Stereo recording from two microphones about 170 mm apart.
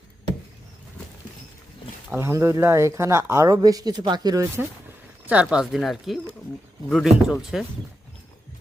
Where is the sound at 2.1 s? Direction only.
15° right (ahead or behind).